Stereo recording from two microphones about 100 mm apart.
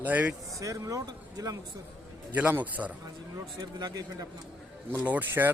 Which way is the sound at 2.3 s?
15° right (ahead or behind).